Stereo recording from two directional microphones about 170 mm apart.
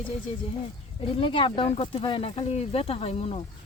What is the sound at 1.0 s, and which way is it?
Speech, 30° left (ahead or behind).